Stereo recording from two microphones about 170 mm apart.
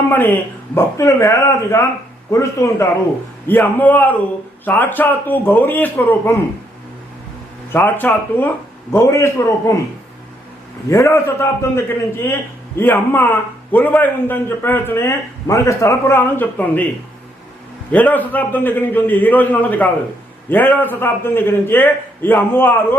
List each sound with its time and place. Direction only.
0.1 s a man's voice: 10° left (ahead or behind)
7.7 s a man's voice: 10° left (ahead or behind)
10.8 s a man's voice: 15° left (ahead or behind)
17.9 s a man's voice: 10° left (ahead or behind)